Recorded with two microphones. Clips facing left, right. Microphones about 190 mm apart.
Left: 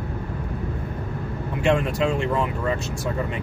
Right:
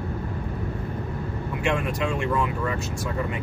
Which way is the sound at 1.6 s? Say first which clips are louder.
Left 5 dB; 30° left (ahead or behind).